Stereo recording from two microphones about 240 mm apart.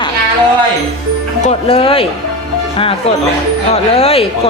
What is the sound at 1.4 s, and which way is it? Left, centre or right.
Speech, left.